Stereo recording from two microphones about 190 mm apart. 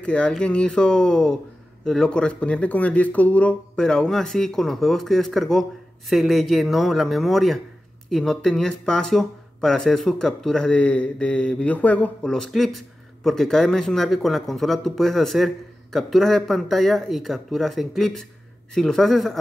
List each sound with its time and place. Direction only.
0.0 s speech: 5° left (ahead or behind)